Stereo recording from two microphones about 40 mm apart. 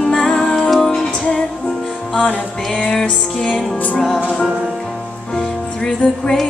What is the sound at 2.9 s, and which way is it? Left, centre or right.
Music, centre.